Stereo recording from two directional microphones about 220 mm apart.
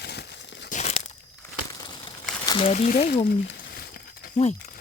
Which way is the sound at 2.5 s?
25° left (ahead or behind).